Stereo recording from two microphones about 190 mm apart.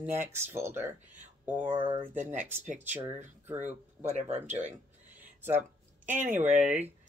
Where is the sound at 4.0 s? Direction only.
35° right (ahead or behind).